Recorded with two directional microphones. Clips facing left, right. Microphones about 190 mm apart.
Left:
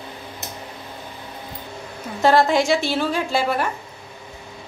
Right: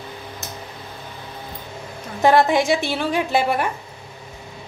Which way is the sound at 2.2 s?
15° right (ahead or behind).